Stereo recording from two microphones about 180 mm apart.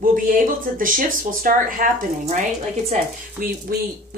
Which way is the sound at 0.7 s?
50° right (ahead or behind).